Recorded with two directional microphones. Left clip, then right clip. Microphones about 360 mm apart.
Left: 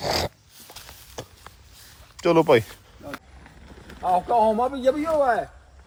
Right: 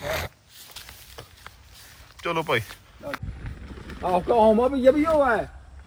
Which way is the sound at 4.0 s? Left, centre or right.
Right.